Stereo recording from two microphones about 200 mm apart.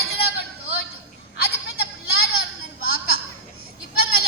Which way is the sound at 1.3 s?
50° left (ahead or behind).